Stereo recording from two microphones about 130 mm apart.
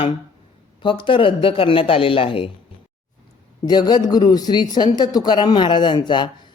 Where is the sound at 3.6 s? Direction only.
30° left (ahead or behind).